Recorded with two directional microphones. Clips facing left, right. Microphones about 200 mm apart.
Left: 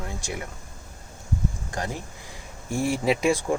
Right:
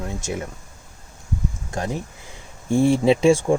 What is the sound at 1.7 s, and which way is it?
Speech, 20° right (ahead or behind).